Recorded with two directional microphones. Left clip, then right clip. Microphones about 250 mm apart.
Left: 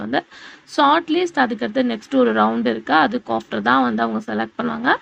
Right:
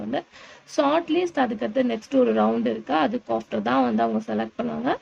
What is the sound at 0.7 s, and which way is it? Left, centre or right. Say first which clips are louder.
A woman's voice: left 6 dB; centre.